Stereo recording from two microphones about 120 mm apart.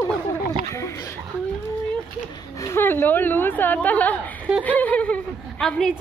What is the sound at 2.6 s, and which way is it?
A woman's voice, 20° left (ahead or behind).